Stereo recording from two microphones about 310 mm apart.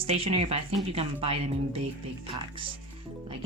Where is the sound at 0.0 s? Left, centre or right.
Centre.